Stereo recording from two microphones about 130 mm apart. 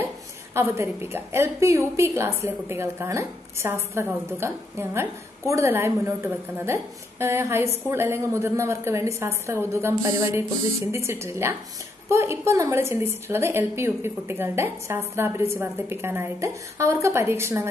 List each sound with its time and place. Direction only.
0.6 s a woman's voice: 20° right (ahead or behind)